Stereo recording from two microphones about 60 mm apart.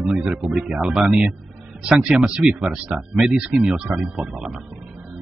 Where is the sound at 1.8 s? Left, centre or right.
Centre.